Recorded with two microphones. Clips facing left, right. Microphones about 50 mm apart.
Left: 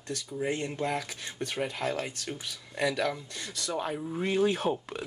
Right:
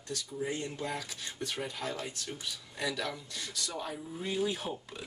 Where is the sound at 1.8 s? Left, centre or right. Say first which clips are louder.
Left 5 dB; left.